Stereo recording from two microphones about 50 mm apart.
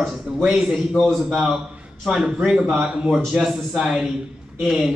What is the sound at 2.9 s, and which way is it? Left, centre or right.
A man's voice, centre.